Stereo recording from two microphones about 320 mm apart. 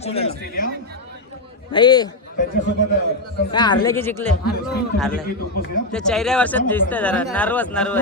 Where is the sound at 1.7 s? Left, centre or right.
Centre.